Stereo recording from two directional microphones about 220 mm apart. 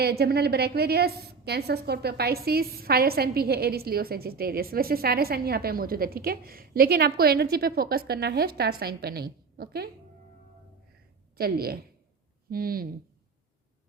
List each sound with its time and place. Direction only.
0.0 s a woman's voice: 45° right (ahead or behind)
11.3 s a woman's voice: 45° right (ahead or behind)